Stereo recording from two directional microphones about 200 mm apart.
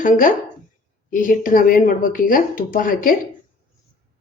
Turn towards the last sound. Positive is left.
turn(degrees=45)  # may be behind; listen again after turning